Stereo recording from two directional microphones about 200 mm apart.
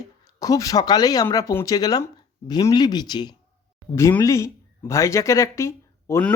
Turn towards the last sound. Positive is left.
turn(degrees=15)  # may be behind; listen again after turning